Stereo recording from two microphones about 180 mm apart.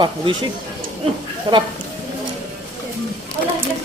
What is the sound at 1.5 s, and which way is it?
Speech, 25° right (ahead or behind).